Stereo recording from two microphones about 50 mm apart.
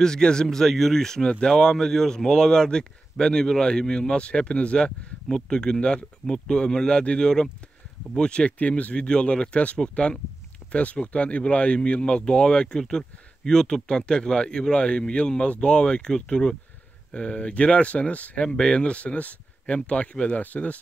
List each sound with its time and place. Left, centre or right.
0.0 s speech: centre; by 20.8 s left